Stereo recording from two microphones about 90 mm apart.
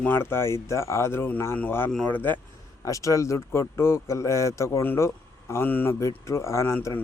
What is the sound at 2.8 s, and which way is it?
Speech, 40° left (ahead or behind).